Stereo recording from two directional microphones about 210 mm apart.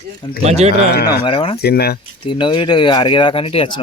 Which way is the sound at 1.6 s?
50° left (ahead or behind).